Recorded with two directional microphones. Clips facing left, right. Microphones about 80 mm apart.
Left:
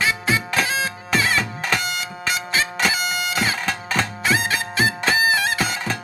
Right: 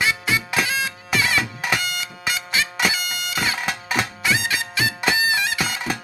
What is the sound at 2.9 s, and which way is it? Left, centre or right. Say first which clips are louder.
Bagpipes: left 4 dB; left.